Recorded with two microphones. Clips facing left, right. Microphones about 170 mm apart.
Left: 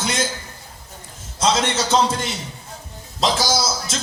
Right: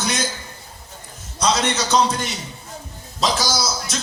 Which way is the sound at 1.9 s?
25° left (ahead or behind).